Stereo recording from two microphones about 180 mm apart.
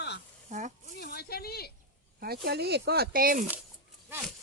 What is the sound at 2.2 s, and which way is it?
Speech, 60° right (ahead or behind).